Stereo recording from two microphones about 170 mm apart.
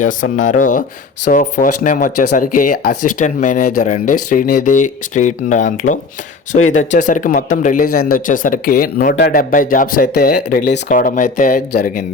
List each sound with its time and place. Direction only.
0.0 s speech: 50° left (ahead or behind)
11.7 s speech: 65° left (ahead or behind)